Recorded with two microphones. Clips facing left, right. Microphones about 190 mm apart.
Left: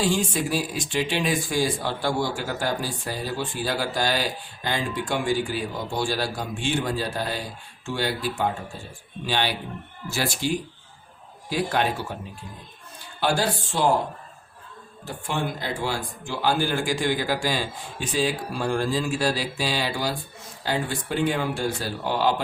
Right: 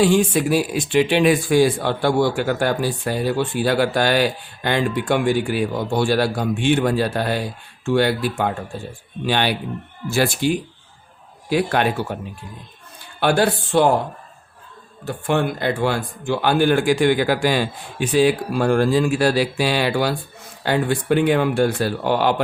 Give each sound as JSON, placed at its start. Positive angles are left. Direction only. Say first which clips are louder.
{"t": 0.0, "sound": "speech", "louder": "right 8 dB", "side_deg": -60}
{"t": 13.1, "sound": "speech", "louder": "right 6 dB", "side_deg": -60}
{"t": 15.0, "sound": "speech", "louder": "right 8 dB", "side_deg": -60}